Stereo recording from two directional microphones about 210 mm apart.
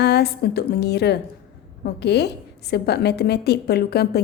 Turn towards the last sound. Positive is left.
turn(degrees=50)  # may be behind; listen again after turning